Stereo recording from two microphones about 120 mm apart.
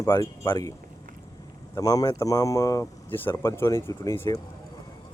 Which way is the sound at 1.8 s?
30° left (ahead or behind).